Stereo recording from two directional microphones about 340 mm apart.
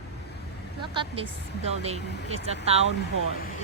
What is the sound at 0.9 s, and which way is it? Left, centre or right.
Speech, centre.